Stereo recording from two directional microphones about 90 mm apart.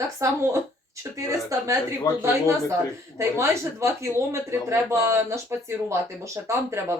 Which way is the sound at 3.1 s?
30° right (ahead or behind).